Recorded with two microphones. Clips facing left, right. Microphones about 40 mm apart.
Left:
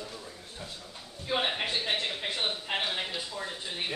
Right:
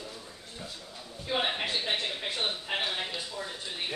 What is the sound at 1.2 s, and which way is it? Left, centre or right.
Speech, centre.